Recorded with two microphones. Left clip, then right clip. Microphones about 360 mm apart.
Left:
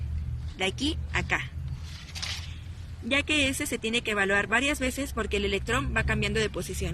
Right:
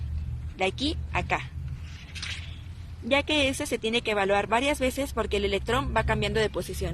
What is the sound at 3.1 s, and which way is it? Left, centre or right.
Speech, centre.